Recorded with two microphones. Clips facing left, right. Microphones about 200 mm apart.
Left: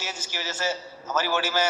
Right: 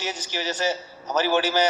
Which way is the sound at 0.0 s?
15° right (ahead or behind).